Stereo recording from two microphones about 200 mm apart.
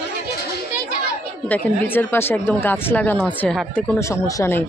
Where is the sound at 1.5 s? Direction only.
10° left (ahead or behind).